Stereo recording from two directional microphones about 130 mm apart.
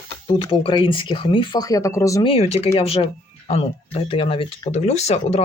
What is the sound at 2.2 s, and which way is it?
Speech, 50° left (ahead or behind).